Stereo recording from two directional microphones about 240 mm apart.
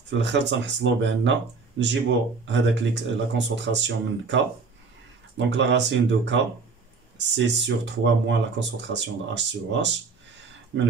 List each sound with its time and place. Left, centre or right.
0.2 s speech: right
5.6 s speech: right